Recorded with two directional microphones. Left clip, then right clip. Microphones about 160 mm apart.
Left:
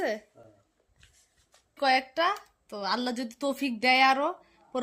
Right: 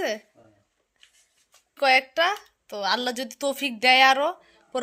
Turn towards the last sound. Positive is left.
turn(degrees=-5)  # may be behind; listen again after turning